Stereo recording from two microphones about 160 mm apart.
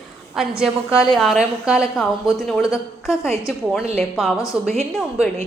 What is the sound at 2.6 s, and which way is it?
Speech, 20° left (ahead or behind).